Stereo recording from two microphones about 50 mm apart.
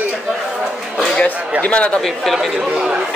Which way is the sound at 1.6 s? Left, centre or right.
Left.